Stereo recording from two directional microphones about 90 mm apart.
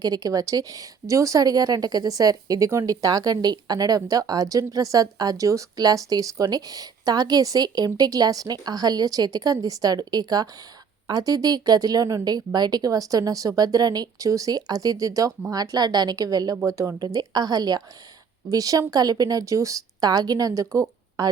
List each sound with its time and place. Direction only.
0.0 s a woman's voice: 45° right (ahead or behind)